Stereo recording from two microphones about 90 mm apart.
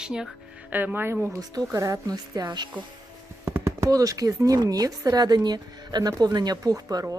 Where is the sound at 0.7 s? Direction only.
20° right (ahead or behind).